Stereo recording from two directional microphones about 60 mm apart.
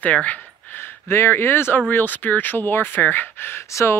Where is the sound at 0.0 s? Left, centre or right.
Left.